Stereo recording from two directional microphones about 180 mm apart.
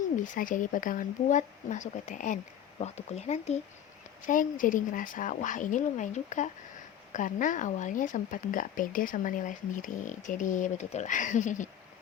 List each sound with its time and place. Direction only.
0.0 s speech: 50° left (ahead or behind)